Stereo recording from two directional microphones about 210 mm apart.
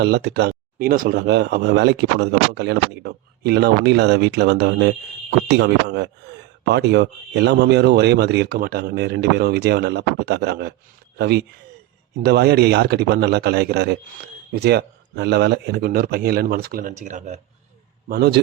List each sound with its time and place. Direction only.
0.0 s a man's voice: 55° right (ahead or behind); by 17.4 s 35° right (ahead or behind)
18.1 s speech: 50° right (ahead or behind)